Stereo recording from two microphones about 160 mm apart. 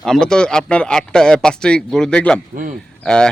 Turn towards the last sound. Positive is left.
turn(degrees=5)  # may be behind; listen again after turning